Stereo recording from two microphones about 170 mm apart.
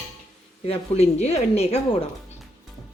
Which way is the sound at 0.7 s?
40° left (ahead or behind).